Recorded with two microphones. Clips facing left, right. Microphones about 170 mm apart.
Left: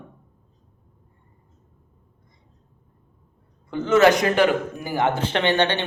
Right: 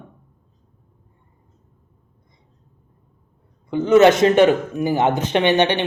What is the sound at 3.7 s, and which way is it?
Speech, 15° right (ahead or behind).